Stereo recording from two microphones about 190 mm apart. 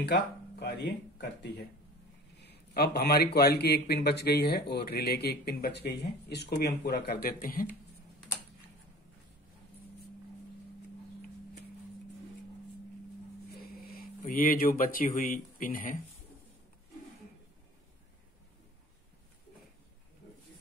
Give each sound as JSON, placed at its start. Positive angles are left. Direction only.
{"t": 0.6, "sound": "speech", "side_deg": 60}
{"t": 13.5, "sound": "speech", "side_deg": 55}